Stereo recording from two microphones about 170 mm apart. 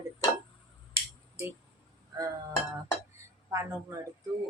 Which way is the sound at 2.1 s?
25° right (ahead or behind).